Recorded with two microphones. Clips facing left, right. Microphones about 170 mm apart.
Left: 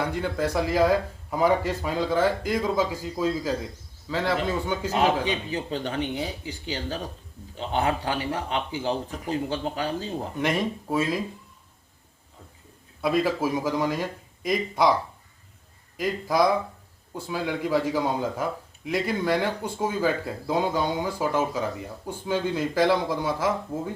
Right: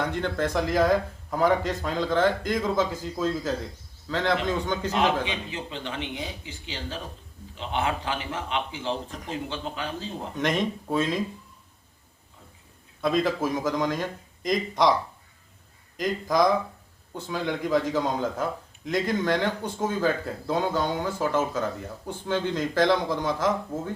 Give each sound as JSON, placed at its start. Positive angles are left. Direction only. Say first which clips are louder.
{"t": 0.0, "sound": "speech", "louder": "even", "side_deg": 10}
{"t": 5.2, "sound": "speech", "louder": "left 4 dB", "side_deg": 40}
{"t": 9.0, "sound": "speech", "louder": "left 4 dB", "side_deg": 5}
{"t": 9.5, "sound": "speech", "louder": "left 5 dB", "side_deg": 40}
{"t": 10.3, "sound": "speech", "louder": "right 1 dB", "side_deg": 5}
{"t": 13.0, "sound": "speech", "louder": "left 1 dB", "side_deg": 10}
{"t": 16.0, "sound": "speech", "louder": "even", "side_deg": 5}